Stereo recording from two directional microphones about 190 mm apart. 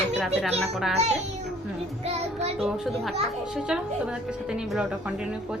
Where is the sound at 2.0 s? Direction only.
35° right (ahead or behind).